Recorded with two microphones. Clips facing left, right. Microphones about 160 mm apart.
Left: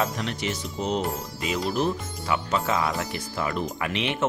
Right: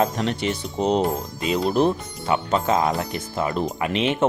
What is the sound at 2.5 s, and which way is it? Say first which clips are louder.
Speech: right 5 dB; 45° right (ahead or behind).